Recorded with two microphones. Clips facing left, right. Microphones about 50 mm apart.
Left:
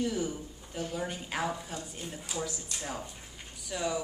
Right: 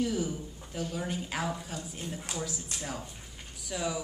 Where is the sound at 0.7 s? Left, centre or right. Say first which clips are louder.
Even; centre.